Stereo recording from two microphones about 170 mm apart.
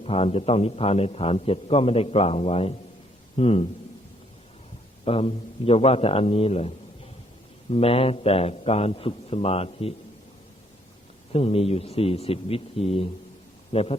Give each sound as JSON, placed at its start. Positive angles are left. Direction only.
{"t": 0.0, "sound": "a man's voice", "side_deg": 35}
{"t": 5.0, "sound": "a man's voice", "side_deg": 35}
{"t": 11.3, "sound": "a man's voice", "side_deg": 35}